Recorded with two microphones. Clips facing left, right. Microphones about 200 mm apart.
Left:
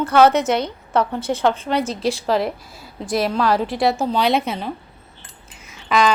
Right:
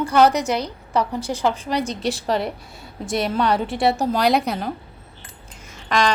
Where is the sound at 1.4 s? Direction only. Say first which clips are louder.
Left 2 dB; centre (ahead or behind).